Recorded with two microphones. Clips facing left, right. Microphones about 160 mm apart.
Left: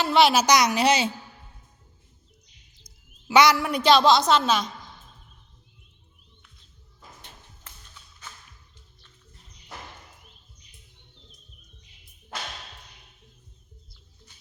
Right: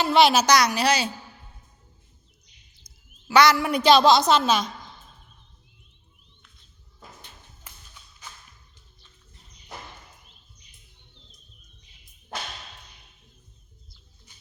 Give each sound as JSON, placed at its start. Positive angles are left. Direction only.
{"t": 0.0, "sound": "a woman's voice", "side_deg": 0}
{"t": 0.4, "sound": "a woman's voice", "side_deg": 20}
{"t": 2.8, "sound": "a sound", "side_deg": 15}
{"t": 3.6, "sound": "a woman's voice", "side_deg": 0}
{"t": 7.7, "sound": "music", "side_deg": -10}